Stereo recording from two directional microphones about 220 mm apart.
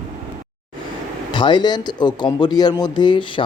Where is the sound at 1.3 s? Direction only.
20° left (ahead or behind).